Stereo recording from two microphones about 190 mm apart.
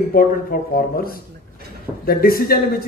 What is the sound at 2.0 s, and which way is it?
Speech, 50° left (ahead or behind).